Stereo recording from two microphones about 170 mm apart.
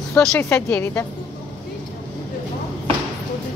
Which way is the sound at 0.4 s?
15° left (ahead or behind).